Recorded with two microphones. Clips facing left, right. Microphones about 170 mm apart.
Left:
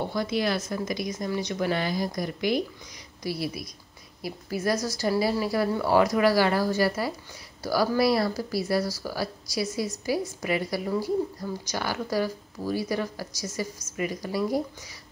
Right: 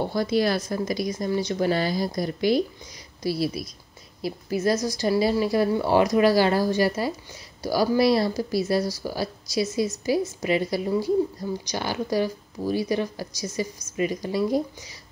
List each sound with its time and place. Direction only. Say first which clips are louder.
0.0 s speech: right 4 dB; 35° right (ahead or behind)